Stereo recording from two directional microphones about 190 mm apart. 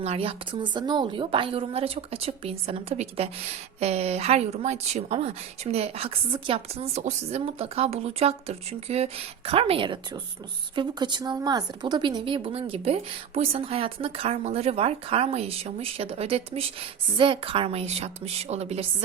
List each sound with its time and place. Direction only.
0.0 s a woman's voice: 30° right (ahead or behind)